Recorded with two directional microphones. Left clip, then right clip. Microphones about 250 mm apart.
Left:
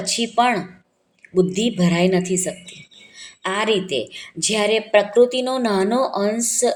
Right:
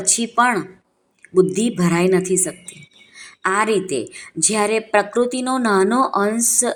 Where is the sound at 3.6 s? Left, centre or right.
Centre.